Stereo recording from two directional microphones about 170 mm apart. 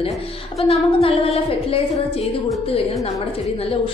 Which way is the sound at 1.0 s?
35° left (ahead or behind).